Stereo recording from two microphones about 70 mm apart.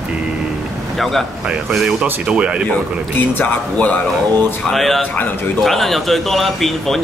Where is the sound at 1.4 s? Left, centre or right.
Centre.